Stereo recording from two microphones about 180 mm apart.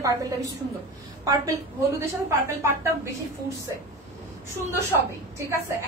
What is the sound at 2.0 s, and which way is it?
A woman's voice, 15° right (ahead or behind).